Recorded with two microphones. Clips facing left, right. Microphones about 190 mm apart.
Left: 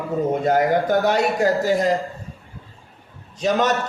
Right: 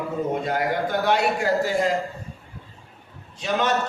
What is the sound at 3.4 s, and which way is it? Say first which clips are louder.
Speech: left 5 dB; 40° left (ahead or behind).